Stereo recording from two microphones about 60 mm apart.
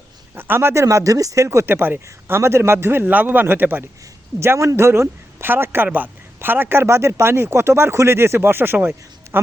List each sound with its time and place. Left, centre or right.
0.3 s speech: right
1.5 s speech: right
4.4 s speech: right
9.3 s a sound: right